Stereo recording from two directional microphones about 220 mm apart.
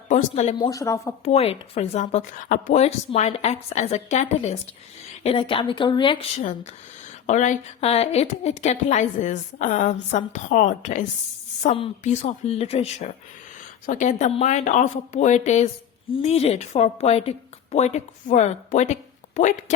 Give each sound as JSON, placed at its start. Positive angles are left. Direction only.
{"t": 0.1, "sound": "speech", "side_deg": 30}
{"t": 0.7, "sound": "speech", "side_deg": 15}
{"t": 1.2, "sound": "speech", "side_deg": 30}
{"t": 7.3, "sound": "a woman's voice", "side_deg": 35}